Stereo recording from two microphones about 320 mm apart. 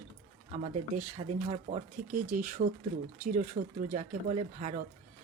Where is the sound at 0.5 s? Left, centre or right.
Right.